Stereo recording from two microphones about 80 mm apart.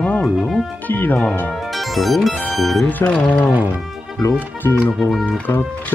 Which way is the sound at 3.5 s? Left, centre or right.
Centre.